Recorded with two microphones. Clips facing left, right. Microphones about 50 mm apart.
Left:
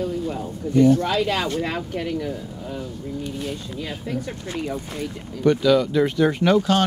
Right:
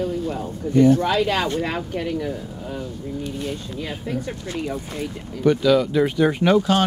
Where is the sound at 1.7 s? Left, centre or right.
Right.